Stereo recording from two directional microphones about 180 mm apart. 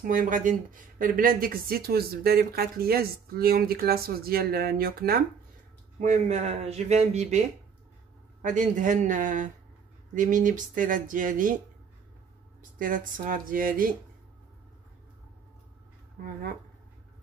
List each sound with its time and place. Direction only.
0.0 s speech: 50° right (ahead or behind)
5.9 s speech: 40° right (ahead or behind)
12.7 s speech: 50° right (ahead or behind)
16.2 s speech: 50° right (ahead or behind)